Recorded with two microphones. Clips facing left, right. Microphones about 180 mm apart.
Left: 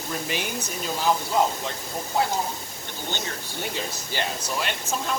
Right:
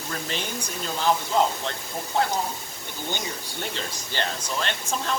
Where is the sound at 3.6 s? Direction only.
10° left (ahead or behind).